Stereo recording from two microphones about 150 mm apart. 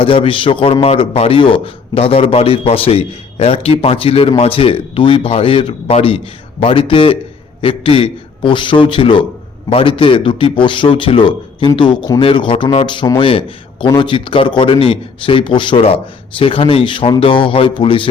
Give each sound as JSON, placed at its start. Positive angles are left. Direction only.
{"t": 0.0, "sound": "a man's voice", "side_deg": 35}